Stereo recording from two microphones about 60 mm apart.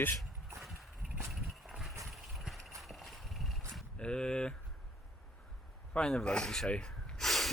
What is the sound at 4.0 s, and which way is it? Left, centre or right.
Speech, centre.